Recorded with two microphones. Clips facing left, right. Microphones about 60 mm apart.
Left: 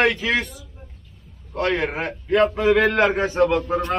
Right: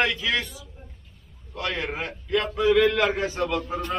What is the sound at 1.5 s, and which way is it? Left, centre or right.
A man's voice, left.